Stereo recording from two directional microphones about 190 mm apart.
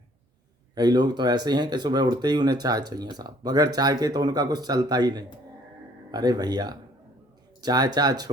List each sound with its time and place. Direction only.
0.8 s speech: 20° right (ahead or behind)